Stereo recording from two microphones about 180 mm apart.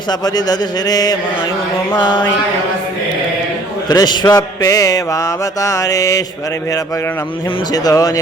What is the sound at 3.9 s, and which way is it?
Mantra, 25° left (ahead or behind).